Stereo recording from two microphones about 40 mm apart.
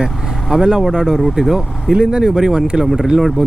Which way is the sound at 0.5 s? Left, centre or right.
Centre.